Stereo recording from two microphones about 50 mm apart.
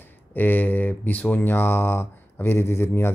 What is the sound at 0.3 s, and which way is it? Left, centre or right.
Speech, left.